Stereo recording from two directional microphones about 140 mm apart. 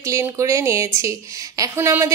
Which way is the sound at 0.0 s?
20° right (ahead or behind).